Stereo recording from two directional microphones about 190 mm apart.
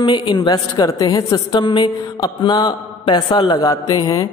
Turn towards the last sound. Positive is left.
turn(degrees=20)  # may be behind; listen again after turning